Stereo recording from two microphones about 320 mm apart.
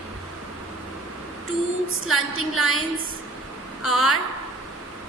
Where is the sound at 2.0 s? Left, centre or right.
Left.